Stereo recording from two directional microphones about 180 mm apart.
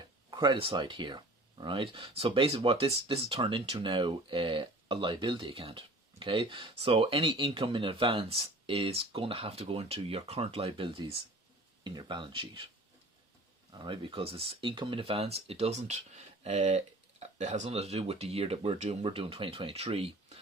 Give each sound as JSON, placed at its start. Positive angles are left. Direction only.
{"t": 0.3, "sound": "speech", "side_deg": -25}
{"t": 13.7, "sound": "speech", "side_deg": -25}